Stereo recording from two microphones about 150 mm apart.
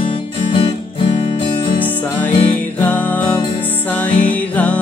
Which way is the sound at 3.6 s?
10° left (ahead or behind).